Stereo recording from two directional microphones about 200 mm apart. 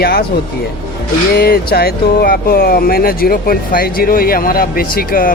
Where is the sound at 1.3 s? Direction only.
50° left (ahead or behind).